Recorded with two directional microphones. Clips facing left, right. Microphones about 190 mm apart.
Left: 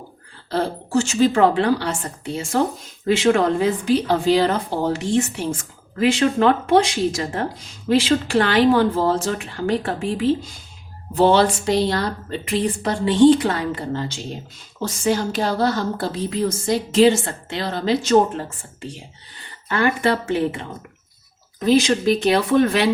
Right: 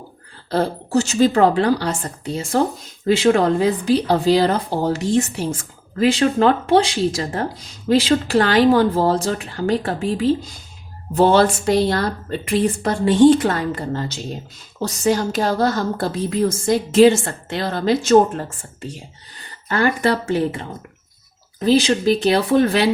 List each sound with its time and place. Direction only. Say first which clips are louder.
0.5 s a woman's voice: right 2 dB; 40° right (ahead or behind)